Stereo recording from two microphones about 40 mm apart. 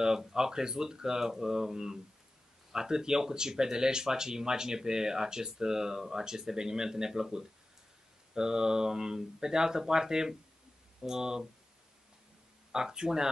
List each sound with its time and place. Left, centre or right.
0.0 s speech: centre
12.7 s speech: centre